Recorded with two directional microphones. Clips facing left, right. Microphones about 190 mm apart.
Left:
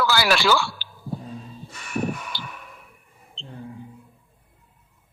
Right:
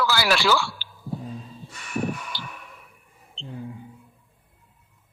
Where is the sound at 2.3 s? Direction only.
60° left (ahead or behind).